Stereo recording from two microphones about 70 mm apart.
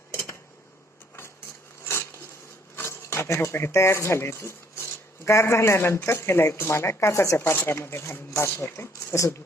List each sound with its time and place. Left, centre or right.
1.8 s a sound: left
2.7 s speech: left
7.3 s speech: left